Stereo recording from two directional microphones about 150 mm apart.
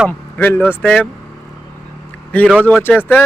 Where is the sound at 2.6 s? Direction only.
10° left (ahead or behind).